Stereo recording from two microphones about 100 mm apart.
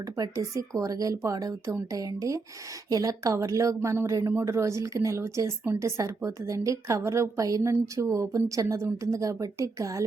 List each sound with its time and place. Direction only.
0.2 s a woman's voice: 35° right (ahead or behind)